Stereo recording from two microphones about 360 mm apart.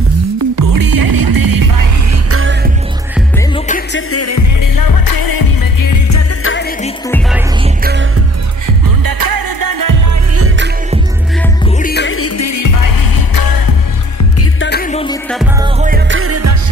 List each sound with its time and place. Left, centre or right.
0.6 s music: right
2.3 s music: right
3.5 s music: left
4.1 s music: left
6.4 s music: left
7.1 s music: centre
9.0 s music: right
10.3 s music: right
11.6 s music: left
14.6 s music: left
15.6 s music: centre
16.1 s music: right